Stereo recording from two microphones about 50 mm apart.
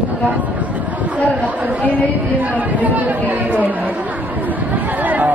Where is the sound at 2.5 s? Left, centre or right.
Right.